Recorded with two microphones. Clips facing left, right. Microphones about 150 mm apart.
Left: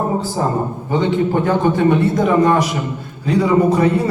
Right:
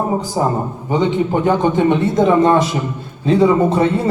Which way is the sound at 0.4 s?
15° right (ahead or behind).